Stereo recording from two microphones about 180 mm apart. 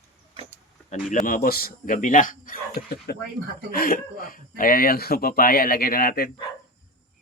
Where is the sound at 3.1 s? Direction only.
60° left (ahead or behind).